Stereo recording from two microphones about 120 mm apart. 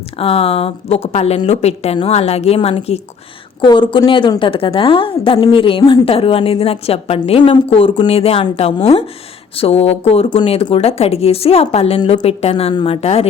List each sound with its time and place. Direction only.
0.2 s speech: 55° left (ahead or behind)
3.6 s a woman's voice: 40° left (ahead or behind); by 10.2 s 55° left (ahead or behind)
10.2 s speech: 45° left (ahead or behind)
11.9 s a woman's voice: 40° left (ahead or behind)
12.2 s speech: 60° left (ahead or behind)